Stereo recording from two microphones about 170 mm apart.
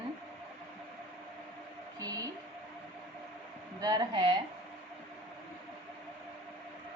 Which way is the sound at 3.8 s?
25° right (ahead or behind).